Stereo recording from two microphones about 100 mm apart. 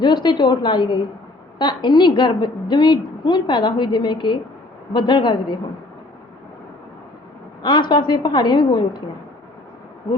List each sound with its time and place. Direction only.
0.0 s a woman's voice: 50° left (ahead or behind)
7.6 s a woman's voice: 50° left (ahead or behind)